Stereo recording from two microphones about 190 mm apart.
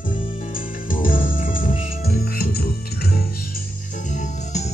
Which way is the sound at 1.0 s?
45° left (ahead or behind).